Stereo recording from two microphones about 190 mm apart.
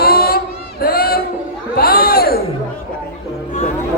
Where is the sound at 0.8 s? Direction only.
50° left (ahead or behind).